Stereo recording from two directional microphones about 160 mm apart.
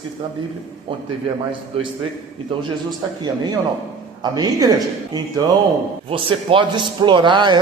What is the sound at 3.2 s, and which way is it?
A man's voice, 25° right (ahead or behind).